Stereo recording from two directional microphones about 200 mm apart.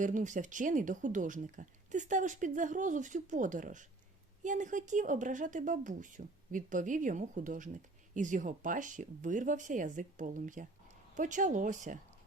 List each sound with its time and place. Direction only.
0.0 s speech: 40° right (ahead or behind)